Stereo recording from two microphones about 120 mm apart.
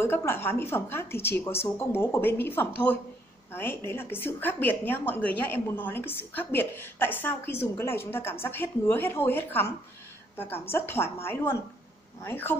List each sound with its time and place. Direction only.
0.0 s a woman's voice: 20° left (ahead or behind)